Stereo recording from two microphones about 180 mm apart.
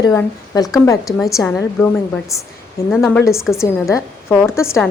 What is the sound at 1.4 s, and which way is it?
A woman's voice, 10° left (ahead or behind).